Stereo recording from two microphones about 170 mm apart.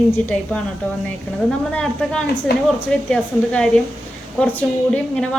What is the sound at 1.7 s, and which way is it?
A woman's voice, 5° left (ahead or behind).